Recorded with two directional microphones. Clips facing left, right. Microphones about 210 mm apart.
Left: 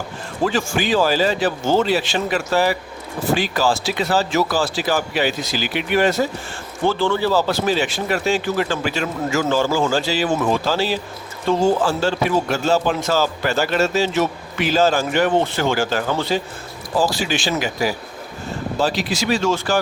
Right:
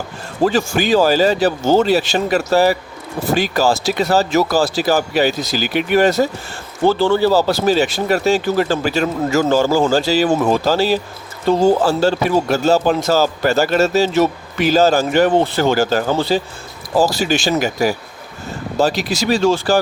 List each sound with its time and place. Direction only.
0.4 s a man's voice: 40° right (ahead or behind)